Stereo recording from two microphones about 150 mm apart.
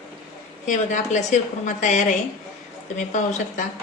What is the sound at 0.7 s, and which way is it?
A woman's voice, 55° left (ahead or behind).